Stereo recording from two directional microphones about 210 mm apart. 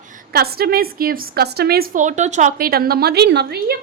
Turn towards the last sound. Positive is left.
turn(degrees=-50)  # may be behind; listen again after turning